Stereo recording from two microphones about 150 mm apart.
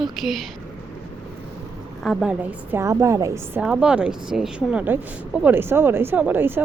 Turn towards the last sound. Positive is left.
turn(degrees=-15)  # may be behind; listen again after turning